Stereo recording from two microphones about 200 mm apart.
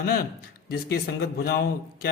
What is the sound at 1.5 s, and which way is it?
Speech, 50° left (ahead or behind).